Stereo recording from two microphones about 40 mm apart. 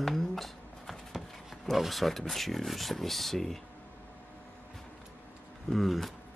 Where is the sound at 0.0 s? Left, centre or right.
Centre.